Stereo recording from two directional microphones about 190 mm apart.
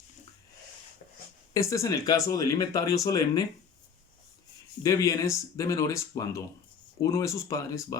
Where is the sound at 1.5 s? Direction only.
15° left (ahead or behind).